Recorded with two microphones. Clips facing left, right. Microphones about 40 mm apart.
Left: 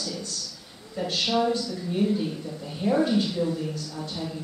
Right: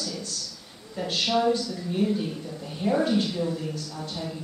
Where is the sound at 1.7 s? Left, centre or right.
Centre.